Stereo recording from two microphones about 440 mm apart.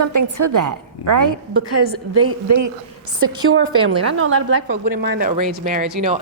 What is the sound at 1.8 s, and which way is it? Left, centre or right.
A woman's voice, right.